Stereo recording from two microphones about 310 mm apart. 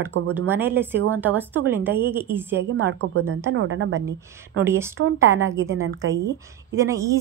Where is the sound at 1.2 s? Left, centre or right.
Centre.